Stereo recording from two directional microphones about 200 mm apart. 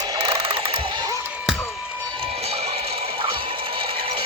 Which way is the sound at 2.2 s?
30° right (ahead or behind).